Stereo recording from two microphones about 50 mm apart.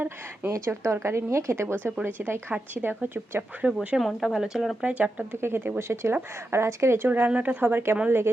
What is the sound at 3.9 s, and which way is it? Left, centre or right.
Speech, centre.